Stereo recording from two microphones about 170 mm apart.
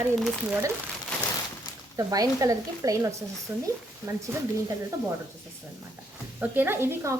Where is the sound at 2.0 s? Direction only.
20° right (ahead or behind).